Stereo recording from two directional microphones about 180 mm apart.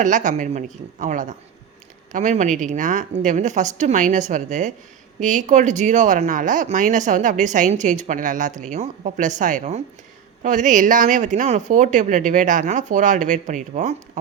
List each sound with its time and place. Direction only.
0.0 s a woman's voice: 45° right (ahead or behind)